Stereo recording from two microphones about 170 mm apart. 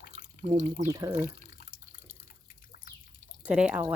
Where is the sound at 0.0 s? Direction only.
55° left (ahead or behind).